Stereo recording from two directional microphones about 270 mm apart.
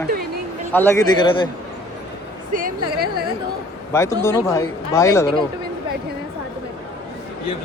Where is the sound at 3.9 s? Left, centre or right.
Centre.